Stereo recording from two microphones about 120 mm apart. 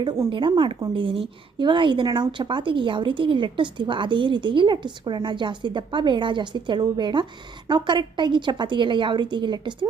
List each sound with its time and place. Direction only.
0.3 s a woman's voice: 45° right (ahead or behind)